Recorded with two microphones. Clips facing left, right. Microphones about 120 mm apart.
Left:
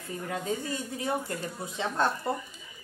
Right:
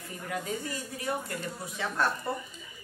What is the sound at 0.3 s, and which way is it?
Speech, 25° left (ahead or behind).